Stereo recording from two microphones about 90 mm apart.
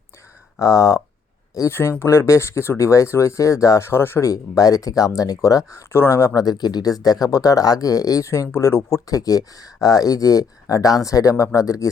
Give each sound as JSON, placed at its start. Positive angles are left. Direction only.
{"t": 0.6, "sound": "speech", "side_deg": 35}
{"t": 4.3, "sound": "speech", "side_deg": 40}
{"t": 6.4, "sound": "speech", "side_deg": 50}